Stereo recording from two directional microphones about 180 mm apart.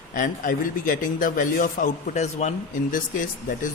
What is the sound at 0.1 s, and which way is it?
A man's voice, 50° left (ahead or behind).